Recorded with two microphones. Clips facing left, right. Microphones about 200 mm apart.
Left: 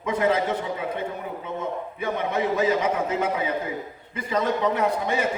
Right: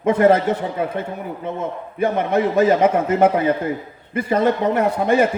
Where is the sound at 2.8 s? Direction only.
55° right (ahead or behind).